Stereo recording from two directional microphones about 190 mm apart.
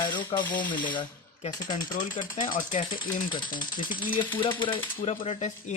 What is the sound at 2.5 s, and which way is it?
Speech, 45° left (ahead or behind).